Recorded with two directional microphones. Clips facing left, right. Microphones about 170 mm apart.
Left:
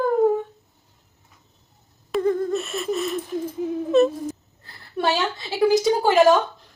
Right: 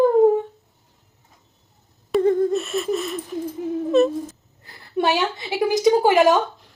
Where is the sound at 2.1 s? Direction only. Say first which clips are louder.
Right 4 dB; centre (ahead or behind).